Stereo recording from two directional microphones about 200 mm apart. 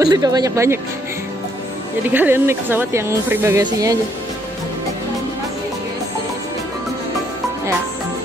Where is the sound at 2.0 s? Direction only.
10° right (ahead or behind).